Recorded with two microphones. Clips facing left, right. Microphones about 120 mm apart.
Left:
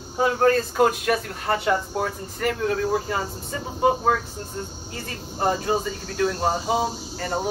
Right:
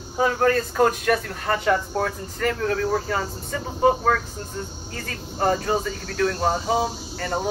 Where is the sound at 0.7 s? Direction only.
5° left (ahead or behind).